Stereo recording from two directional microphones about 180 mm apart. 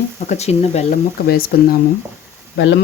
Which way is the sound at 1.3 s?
55° left (ahead or behind).